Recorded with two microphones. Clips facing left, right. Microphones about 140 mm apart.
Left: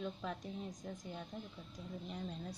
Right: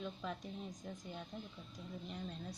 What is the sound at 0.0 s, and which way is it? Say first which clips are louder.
A woman's voice: left 2 dB; centre (ahead or behind).